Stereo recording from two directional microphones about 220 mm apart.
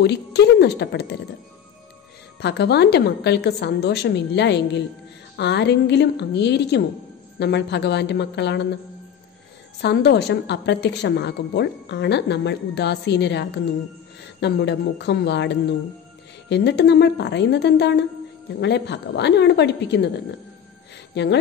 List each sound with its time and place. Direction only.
0.0 s a woman's voice: 50° left (ahead or behind)
2.4 s a woman's voice: 50° left (ahead or behind)
9.8 s a woman's voice: 50° left (ahead or behind)
21.1 s speech: 50° left (ahead or behind)